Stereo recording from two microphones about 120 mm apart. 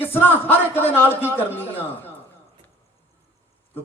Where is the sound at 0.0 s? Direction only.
15° left (ahead or behind).